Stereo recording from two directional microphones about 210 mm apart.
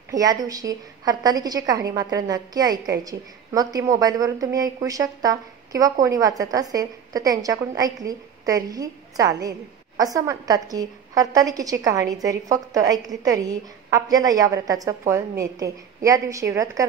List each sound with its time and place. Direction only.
0.1 s a woman's voice: 15° right (ahead or behind)